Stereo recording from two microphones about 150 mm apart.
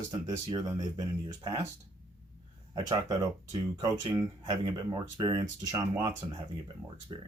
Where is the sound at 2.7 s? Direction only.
25° right (ahead or behind).